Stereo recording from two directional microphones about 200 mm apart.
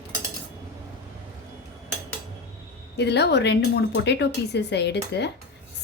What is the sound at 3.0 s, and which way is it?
A woman's voice, 55° left (ahead or behind).